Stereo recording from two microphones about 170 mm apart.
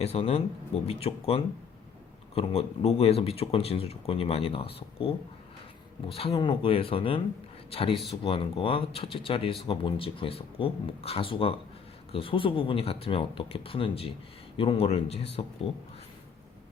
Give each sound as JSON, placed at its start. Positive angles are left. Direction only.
{"t": 0.0, "sound": "speech", "side_deg": 35}